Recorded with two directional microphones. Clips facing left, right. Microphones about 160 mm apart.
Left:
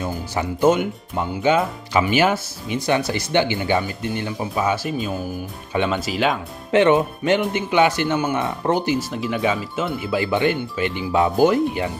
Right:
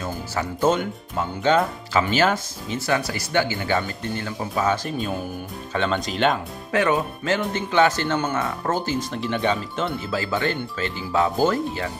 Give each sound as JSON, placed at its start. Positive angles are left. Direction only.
{"t": 0.0, "sound": "speech", "side_deg": 20}
{"t": 2.9, "sound": "speech", "side_deg": 20}
{"t": 6.7, "sound": "speech", "side_deg": 25}
{"t": 9.1, "sound": "speech", "side_deg": 5}